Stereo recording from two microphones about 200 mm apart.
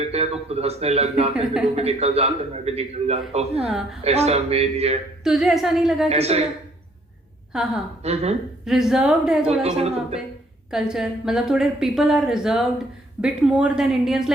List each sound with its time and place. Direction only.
0.0 s a man's voice: 30° right (ahead or behind)
5.2 s a woman's voice: centre (ahead or behind)
6.1 s a man's voice: 30° right (ahead or behind)
7.5 s a woman's voice: 5° right (ahead or behind)
8.0 s a man's voice: 30° right (ahead or behind)
8.6 s a woman's voice: centre (ahead or behind)
9.6 s a man's voice: 30° right (ahead or behind)
10.7 s a woman's voice: centre (ahead or behind)